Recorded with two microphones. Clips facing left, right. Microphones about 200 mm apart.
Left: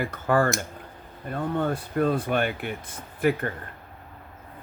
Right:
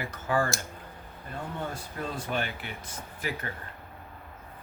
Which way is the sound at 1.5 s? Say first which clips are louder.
Left 13 dB; 60° left (ahead or behind).